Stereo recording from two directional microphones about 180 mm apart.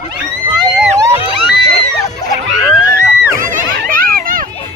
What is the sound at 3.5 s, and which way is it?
Music, 50° right (ahead or behind).